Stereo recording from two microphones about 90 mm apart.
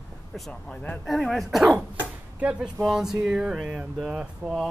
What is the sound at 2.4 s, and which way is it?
Speech, 15° right (ahead or behind).